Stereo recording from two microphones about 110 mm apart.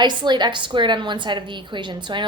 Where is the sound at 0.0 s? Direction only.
40° right (ahead or behind).